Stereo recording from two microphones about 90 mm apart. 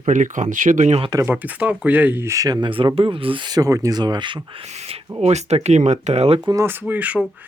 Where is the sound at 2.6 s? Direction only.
65° right (ahead or behind).